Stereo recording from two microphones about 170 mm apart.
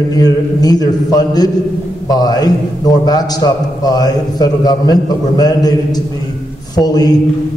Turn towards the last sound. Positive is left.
turn(degrees=25)  # may be behind; listen again after turning